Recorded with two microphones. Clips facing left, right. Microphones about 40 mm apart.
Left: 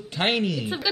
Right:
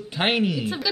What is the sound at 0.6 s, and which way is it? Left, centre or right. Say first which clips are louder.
Speech: even; centre.